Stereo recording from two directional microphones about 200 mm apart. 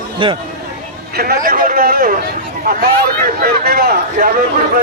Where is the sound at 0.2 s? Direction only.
25° right (ahead or behind).